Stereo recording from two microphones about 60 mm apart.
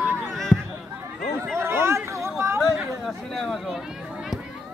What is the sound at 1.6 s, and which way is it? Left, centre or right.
Chatter, right.